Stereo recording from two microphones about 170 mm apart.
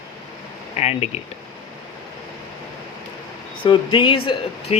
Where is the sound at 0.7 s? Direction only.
40° left (ahead or behind).